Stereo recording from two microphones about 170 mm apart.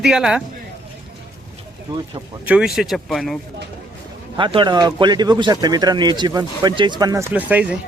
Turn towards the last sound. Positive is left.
turn(degrees=-10)  # may be behind; listen again after turning